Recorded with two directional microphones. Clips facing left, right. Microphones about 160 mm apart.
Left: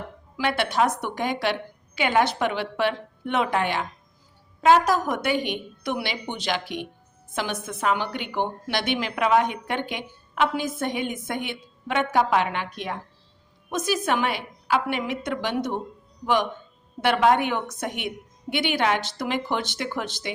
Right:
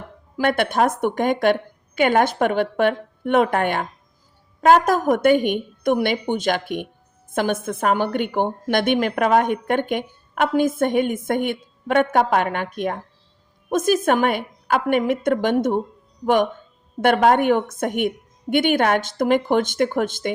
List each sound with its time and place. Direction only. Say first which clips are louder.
0.3 s a woman's voice: right 4 dB; 50° right (ahead or behind)